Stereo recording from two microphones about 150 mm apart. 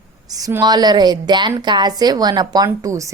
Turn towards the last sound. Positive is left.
turn(degrees=-20)  # may be behind; listen again after turning